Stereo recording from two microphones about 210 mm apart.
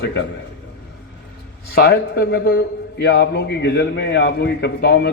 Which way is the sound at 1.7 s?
50° left (ahead or behind).